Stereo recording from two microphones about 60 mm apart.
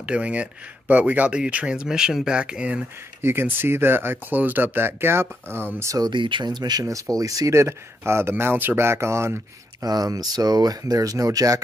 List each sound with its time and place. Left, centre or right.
0.0 s speech: right
3.2 s speech: right
6.6 s speech: right
7.5 s speech: right
9.8 s speech: right